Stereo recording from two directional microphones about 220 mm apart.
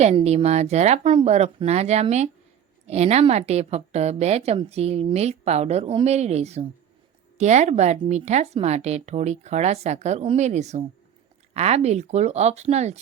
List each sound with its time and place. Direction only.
0.0 s a woman's voice: 30° right (ahead or behind)